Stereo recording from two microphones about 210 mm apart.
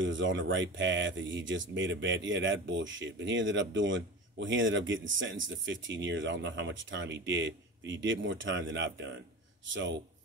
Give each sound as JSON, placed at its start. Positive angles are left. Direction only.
{"t": 0.0, "sound": "speech", "side_deg": -60}